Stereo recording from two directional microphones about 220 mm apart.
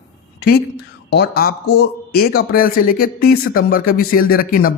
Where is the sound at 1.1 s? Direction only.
45° left (ahead or behind).